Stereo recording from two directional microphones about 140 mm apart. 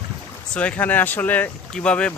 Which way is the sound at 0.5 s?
10° left (ahead or behind).